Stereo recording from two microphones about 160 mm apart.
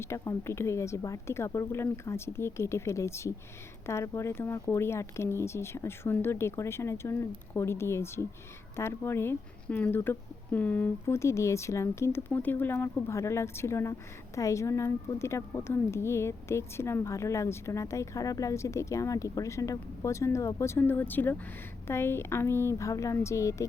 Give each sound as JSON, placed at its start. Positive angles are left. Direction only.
{"t": 0.0, "sound": "a woman's voice", "side_deg": 15}